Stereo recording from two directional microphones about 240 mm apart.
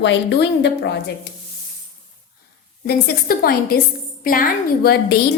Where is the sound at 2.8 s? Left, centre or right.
Left.